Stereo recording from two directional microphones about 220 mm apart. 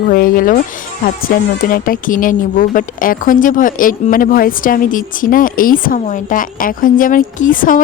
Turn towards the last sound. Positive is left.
turn(degrees=40)  # may be behind; listen again after turning